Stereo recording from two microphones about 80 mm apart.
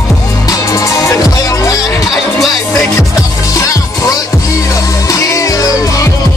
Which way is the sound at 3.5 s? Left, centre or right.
Left.